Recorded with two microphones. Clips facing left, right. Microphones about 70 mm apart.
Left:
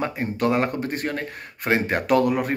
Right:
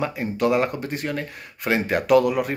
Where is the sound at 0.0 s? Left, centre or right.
Left.